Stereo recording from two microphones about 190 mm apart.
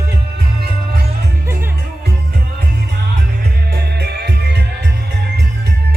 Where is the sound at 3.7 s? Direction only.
55° right (ahead or behind).